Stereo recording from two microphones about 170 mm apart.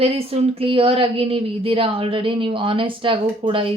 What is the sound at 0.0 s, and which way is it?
Speech, 35° right (ahead or behind).